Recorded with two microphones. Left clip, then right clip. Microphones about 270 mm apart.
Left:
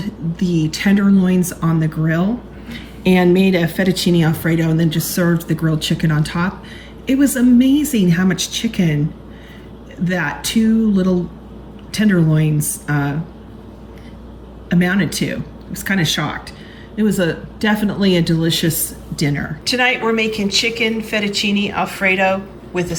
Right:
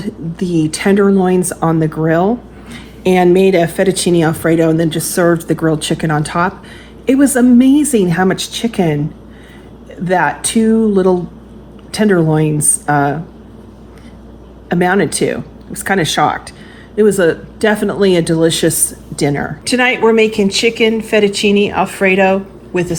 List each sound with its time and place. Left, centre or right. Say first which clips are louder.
0.0 s a woman's voice: right 3 dB; centre
3.3 s speech: right 6 dB; right
4.1 s speech: right 6 dB; right
4.8 s a woman's voice: right 6 dB; centre
10.0 s a woman's voice: right 7 dB; centre
11.9 s a woman's voice: right 6 dB; centre
14.7 s a woman's voice: right 6 dB; centre
19.6 s speech: right 4 dB; centre